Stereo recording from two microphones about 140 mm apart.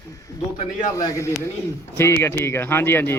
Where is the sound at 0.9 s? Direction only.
20° left (ahead or behind).